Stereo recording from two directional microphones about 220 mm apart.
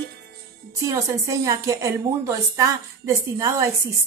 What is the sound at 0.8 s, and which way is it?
A woman's voice, 15° right (ahead or behind).